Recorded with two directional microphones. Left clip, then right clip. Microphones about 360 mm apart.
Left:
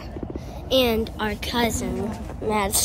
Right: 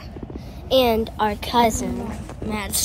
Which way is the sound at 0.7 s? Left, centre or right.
Centre.